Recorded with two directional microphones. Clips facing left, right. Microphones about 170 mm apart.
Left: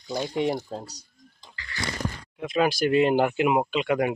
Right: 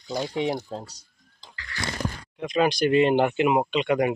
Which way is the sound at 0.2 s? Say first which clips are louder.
Left 1 dB; centre (ahead or behind).